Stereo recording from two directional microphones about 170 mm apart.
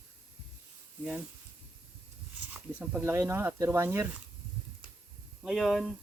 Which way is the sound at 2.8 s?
10° right (ahead or behind).